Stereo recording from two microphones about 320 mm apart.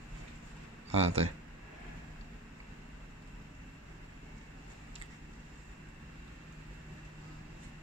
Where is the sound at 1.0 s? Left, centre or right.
Centre.